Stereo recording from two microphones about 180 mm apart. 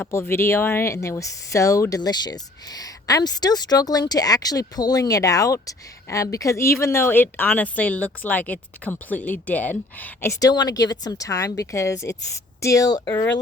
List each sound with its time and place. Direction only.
0.0 s speech: 15° left (ahead or behind)